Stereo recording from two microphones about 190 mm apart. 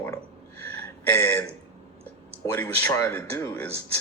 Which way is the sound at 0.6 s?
10° left (ahead or behind).